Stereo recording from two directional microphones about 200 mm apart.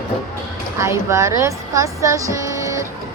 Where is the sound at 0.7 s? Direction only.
15° right (ahead or behind).